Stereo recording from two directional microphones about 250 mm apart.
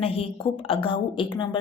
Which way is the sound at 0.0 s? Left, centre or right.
Left.